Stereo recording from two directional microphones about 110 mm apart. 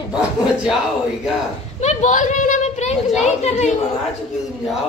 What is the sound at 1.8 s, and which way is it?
A woman's voice, 90° left.